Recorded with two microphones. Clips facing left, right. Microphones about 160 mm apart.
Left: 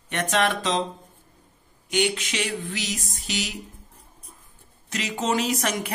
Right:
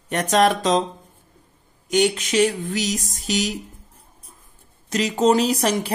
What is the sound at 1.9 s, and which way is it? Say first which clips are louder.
A man's voice: right 5 dB; 40° right (ahead or behind).